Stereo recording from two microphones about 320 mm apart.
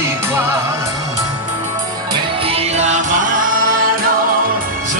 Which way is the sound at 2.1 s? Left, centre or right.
Centre.